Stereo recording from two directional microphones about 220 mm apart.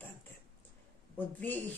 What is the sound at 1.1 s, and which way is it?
Speech, 10° left (ahead or behind).